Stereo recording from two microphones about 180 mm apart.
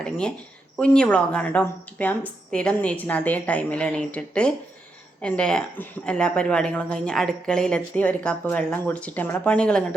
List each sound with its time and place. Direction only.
0.0 s a woman's voice: 5° left (ahead or behind)